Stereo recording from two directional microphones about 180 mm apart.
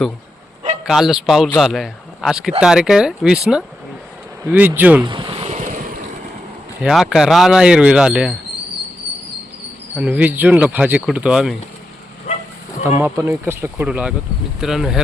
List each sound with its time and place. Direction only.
0.9 s a man's voice: centre (ahead or behind)
5.0 s vehicle: 25° right (ahead or behind); by 6.0 s 45° right (ahead or behind)
6.8 s speech: centre (ahead or behind)
9.9 s speech: 5° right (ahead or behind)
12.8 s speech: 10° right (ahead or behind)